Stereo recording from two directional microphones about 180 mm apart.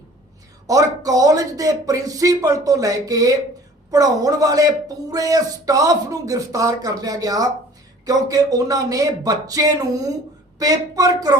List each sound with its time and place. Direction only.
0.7 s speech: 20° right (ahead or behind)